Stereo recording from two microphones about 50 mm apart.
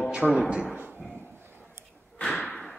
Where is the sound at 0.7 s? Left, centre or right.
Right.